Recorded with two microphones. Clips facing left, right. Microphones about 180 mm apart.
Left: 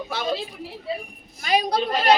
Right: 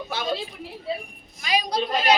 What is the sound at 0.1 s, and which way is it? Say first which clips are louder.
Speech: left 1 dB; centre (ahead or behind).